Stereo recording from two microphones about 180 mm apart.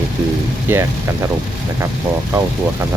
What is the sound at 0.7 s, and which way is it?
Speech, 10° right (ahead or behind).